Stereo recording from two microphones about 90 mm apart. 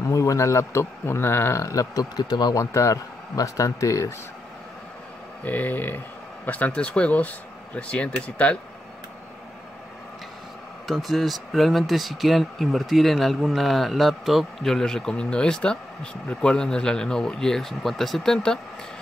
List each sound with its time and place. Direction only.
0.1 s a man's voice: 35° left (ahead or behind)
2.6 s a man's voice: 35° left (ahead or behind)
5.4 s speech: 20° left (ahead or behind)
10.9 s speech: centre (ahead or behind)